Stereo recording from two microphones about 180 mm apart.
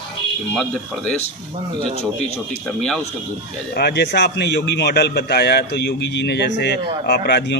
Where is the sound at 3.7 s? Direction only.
65° left (ahead or behind).